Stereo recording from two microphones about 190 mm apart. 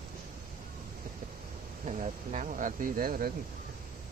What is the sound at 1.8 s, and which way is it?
Speech, 40° right (ahead or behind).